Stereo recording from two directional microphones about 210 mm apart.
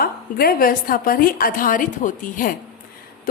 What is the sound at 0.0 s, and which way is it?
A woman's voice, 45° left (ahead or behind).